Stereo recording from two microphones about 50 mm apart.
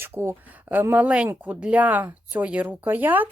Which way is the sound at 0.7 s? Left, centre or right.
Right.